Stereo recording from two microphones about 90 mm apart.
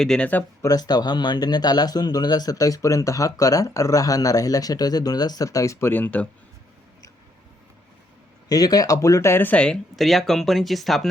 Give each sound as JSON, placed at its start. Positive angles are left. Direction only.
{"t": 0.0, "sound": "speech", "side_deg": 5}
{"t": 0.6, "sound": "speech", "side_deg": 45}
{"t": 8.4, "sound": "speech", "side_deg": 45}
{"t": 9.9, "sound": "speech", "side_deg": 0}